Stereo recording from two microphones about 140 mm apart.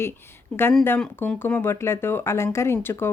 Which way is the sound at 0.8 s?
15° left (ahead or behind).